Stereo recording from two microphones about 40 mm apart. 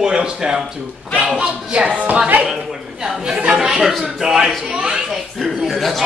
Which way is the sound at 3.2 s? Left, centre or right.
Right.